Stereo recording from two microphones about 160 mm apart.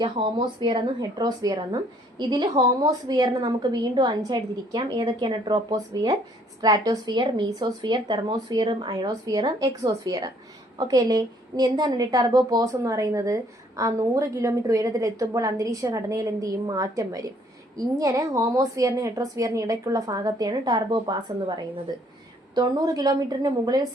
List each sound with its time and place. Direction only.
0.0 s a woman's voice: 30° right (ahead or behind)